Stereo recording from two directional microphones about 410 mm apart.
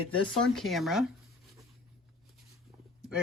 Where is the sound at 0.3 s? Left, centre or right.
Centre.